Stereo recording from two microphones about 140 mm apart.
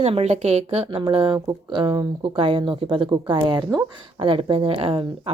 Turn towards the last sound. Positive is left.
turn(degrees=-40)  # may be behind; listen again after turning